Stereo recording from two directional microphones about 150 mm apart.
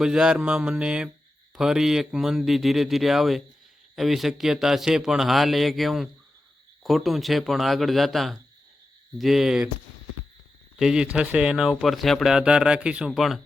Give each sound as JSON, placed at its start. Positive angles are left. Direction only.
{"t": 0.0, "sound": "speech", "side_deg": -5}
{"t": 10.8, "sound": "speech", "side_deg": -5}